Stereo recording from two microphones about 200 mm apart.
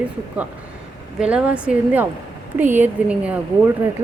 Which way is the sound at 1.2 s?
5° right (ahead or behind).